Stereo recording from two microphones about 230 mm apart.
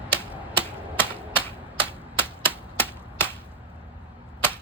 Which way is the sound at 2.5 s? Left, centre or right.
Centre.